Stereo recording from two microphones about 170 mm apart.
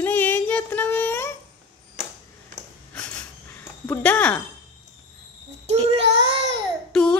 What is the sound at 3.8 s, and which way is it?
Speech, 10° left (ahead or behind).